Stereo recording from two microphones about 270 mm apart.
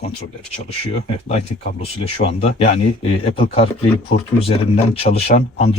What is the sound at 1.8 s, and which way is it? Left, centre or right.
Speech, left.